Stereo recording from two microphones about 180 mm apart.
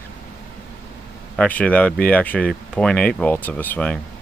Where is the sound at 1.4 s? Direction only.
10° left (ahead or behind).